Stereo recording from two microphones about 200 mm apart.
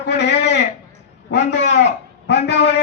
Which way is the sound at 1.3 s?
60° left (ahead or behind).